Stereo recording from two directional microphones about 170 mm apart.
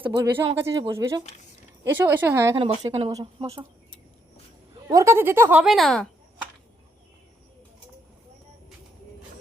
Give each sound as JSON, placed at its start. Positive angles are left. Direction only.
{"t": 0.0, "sound": "speech", "side_deg": -15}
{"t": 2.6, "sound": "speech", "side_deg": -35}
{"t": 4.9, "sound": "speech", "side_deg": -20}